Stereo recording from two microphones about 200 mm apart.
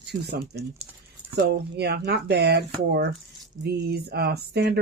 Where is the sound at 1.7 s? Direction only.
55° right (ahead or behind).